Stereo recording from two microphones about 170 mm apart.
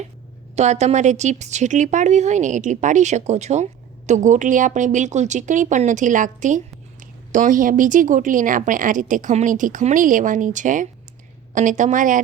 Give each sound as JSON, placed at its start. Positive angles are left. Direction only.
{"t": 0.5, "sound": "speech", "side_deg": -40}